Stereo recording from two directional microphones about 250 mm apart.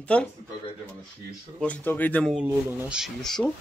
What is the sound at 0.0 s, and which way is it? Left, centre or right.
Speech, centre.